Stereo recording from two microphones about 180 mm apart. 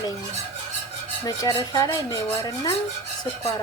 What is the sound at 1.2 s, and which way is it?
Speech, 25° left (ahead or behind).